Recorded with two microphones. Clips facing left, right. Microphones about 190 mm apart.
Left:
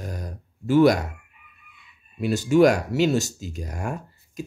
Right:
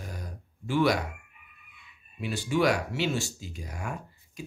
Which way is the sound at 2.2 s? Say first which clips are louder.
Left 9 dB; 45° left (ahead or behind).